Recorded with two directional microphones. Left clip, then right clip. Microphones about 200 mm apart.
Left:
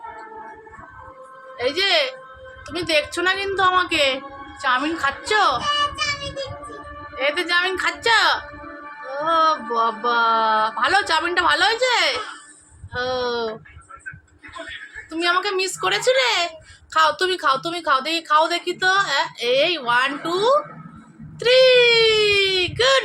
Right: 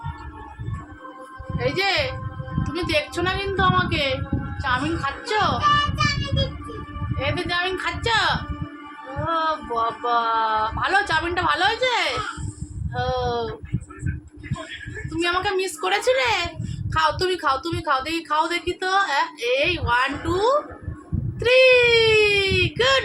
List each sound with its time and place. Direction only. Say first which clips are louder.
1.5 s a woman's voice: left 3 dB; 25° left (ahead or behind)
7.2 s a woman's voice: left 4 dB; 35° left (ahead or behind)
15.1 s a woman's voice: left 2 dB; 25° left (ahead or behind)